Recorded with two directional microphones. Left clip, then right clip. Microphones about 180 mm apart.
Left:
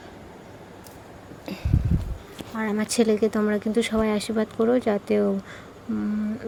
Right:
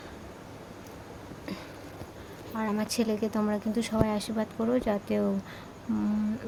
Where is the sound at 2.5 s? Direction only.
10° left (ahead or behind).